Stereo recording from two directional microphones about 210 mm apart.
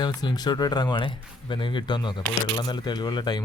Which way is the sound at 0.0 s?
20° left (ahead or behind).